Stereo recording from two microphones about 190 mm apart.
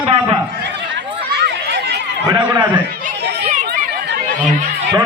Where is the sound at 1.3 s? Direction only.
60° right (ahead or behind).